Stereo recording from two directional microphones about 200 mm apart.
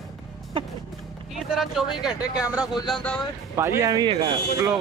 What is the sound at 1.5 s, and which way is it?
Speech, centre (ahead or behind).